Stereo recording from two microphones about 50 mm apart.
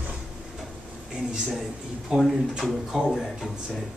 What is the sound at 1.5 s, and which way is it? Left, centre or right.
Speech, centre.